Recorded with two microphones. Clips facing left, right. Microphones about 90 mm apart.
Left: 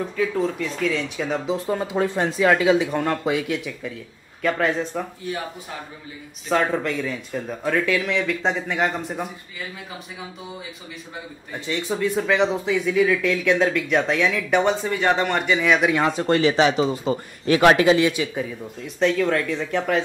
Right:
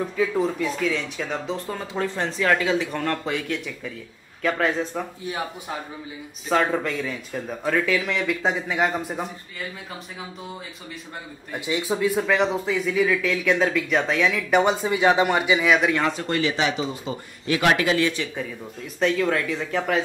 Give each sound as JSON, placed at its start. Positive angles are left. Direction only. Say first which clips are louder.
{"t": 0.2, "sound": "speech", "louder": "even", "side_deg": -10}
{"t": 1.7, "sound": "speech", "louder": "left 7 dB", "side_deg": 20}
{"t": 6.5, "sound": "speech", "louder": "left 1 dB", "side_deg": 0}
{"t": 11.5, "sound": "speech", "louder": "right 1 dB", "side_deg": -10}
{"t": 15.9, "sound": "speech", "louder": "left 4 dB", "side_deg": 20}
{"t": 17.9, "sound": "speech", "louder": "left 3 dB", "side_deg": 15}